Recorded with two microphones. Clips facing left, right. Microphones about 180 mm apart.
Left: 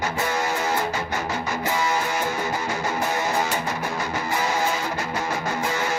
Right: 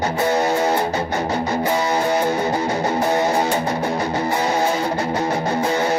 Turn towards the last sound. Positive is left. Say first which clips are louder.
# right 6 dB
turn(degrees=-30)  # may be behind; listen again after turning